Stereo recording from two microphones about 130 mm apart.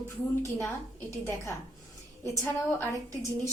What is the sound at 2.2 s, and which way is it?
Speech, 25° left (ahead or behind).